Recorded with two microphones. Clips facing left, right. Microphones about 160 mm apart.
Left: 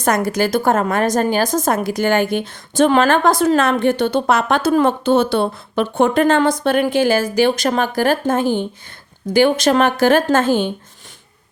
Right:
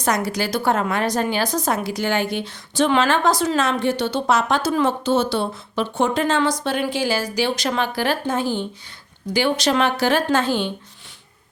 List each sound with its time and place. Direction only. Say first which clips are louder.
0.0 s a woman's voice: left 5 dB; 50° left (ahead or behind)